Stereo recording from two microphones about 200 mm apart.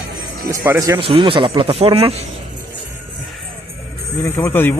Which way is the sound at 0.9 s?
25° right (ahead or behind).